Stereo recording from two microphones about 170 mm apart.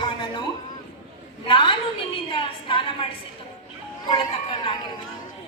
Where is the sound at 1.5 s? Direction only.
30° left (ahead or behind).